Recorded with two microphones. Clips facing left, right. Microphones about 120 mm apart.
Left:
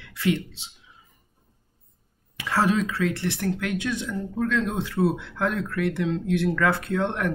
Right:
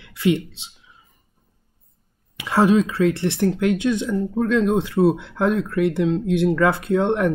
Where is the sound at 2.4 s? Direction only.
20° right (ahead or behind).